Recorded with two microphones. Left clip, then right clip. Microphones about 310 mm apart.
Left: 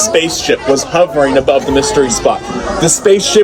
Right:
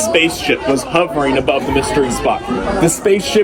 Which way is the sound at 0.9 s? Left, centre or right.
Centre.